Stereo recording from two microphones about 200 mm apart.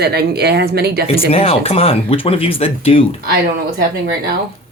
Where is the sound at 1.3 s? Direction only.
30° left (ahead or behind).